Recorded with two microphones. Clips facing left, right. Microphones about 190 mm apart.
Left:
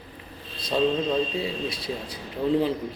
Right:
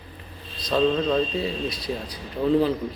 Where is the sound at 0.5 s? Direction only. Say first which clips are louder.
Right 2 dB; 30° left (ahead or behind).